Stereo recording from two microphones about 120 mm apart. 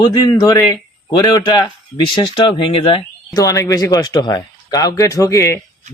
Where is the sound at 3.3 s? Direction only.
30° left (ahead or behind).